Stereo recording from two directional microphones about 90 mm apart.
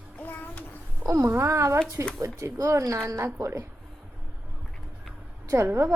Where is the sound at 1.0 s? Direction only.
35° right (ahead or behind).